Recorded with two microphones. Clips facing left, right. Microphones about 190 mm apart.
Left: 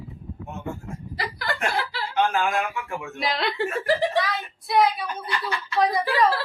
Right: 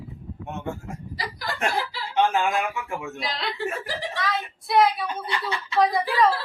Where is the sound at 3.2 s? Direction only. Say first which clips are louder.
Left 5 dB; 60° left (ahead or behind).